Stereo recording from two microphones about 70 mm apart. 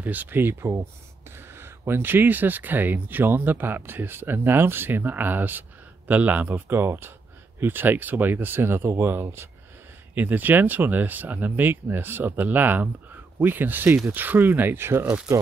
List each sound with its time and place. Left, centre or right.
0.0 s speech: right
10.1 s speech: right